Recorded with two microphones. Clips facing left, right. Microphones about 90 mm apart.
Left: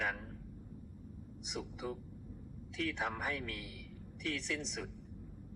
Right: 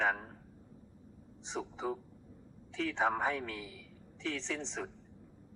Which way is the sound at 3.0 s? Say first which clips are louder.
Right 6 dB; 20° right (ahead or behind).